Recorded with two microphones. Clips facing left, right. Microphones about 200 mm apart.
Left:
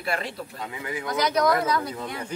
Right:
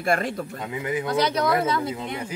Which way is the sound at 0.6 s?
20° right (ahead or behind).